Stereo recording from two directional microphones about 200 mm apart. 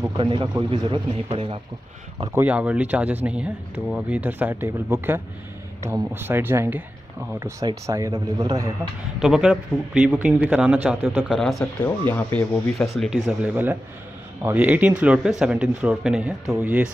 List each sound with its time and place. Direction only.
0.2 s a man's voice: 25° right (ahead or behind)
2.3 s a man's voice: 5° right (ahead or behind)
9.2 s speech: 5° right (ahead or behind)
11.6 s speech: 10° left (ahead or behind); by 16.9 s 5° right (ahead or behind)